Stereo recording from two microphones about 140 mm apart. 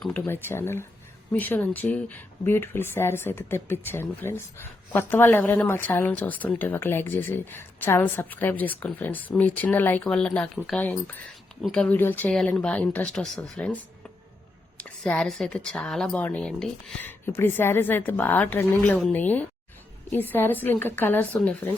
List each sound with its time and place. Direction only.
0.0 s speech: 15° left (ahead or behind)
14.8 s speech: 10° left (ahead or behind)
17.1 s speech: 15° left (ahead or behind)